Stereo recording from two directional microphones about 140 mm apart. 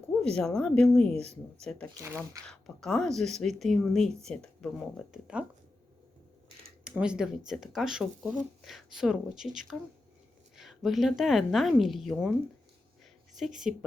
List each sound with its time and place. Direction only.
0.2 s speech: 5° left (ahead or behind)
1.1 s speech: 50° right (ahead or behind)
2.0 s speech: 20° right (ahead or behind)
2.5 s speech: centre (ahead or behind)
6.8 s speech: 5° right (ahead or behind)
13.4 s speech: centre (ahead or behind)